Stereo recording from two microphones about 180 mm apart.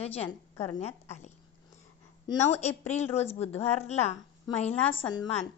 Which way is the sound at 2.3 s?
40° left (ahead or behind).